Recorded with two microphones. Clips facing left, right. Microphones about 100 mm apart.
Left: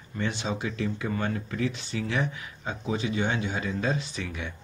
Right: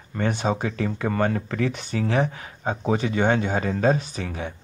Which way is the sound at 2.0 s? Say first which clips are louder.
Right 7 dB; 40° right (ahead or behind).